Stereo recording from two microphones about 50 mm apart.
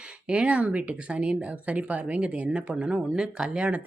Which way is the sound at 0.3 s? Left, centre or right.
Right.